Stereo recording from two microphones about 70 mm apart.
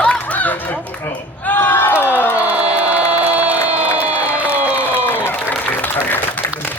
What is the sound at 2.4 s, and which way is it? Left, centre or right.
Crowd, centre.